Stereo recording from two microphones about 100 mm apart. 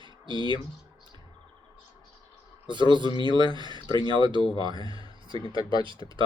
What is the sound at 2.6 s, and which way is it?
Speech, 50° right (ahead or behind).